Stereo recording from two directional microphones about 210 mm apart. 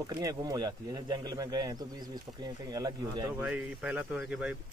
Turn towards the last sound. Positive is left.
turn(degrees=-5)  # may be behind; listen again after turning